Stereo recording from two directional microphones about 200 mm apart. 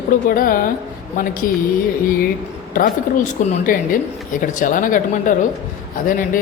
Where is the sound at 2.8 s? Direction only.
45° left (ahead or behind).